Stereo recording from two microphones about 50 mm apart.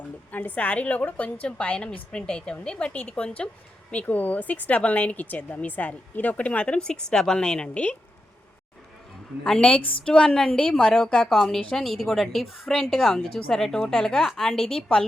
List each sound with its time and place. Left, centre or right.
0.3 s a woman's voice: left
4.0 s a woman's voice: left
9.4 s a woman's voice: centre